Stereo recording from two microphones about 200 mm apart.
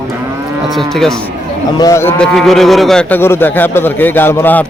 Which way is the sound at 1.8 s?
15° left (ahead or behind).